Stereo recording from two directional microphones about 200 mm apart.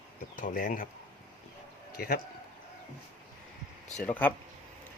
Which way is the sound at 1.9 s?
50° left (ahead or behind).